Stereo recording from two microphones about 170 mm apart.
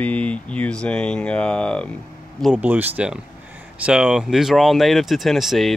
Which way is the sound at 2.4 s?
10° right (ahead or behind).